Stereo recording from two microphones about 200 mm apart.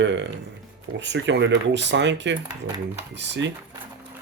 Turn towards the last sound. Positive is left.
turn(degrees=-65)  # may be behind; listen again after turning